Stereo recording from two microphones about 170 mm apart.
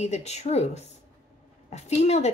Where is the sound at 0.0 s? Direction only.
40° left (ahead or behind).